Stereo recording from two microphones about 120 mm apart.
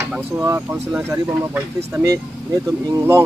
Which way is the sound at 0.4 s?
20° right (ahead or behind).